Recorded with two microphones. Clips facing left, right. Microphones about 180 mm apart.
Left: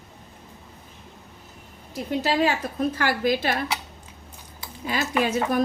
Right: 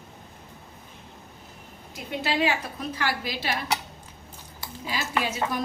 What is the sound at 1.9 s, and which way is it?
A woman's voice, 40° left (ahead or behind).